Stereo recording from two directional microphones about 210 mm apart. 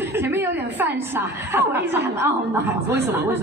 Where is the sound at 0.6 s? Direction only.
55° right (ahead or behind).